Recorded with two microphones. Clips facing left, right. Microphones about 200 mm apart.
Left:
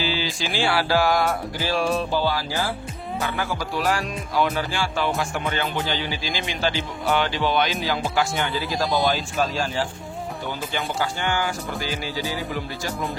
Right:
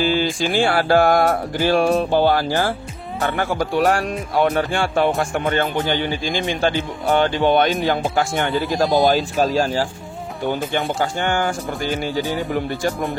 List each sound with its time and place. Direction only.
0.0 s music: 50° right (ahead or behind)
3.2 s speech: 60° right (ahead or behind); by 9.8 s 40° right (ahead or behind)
11.0 s music: 50° right (ahead or behind)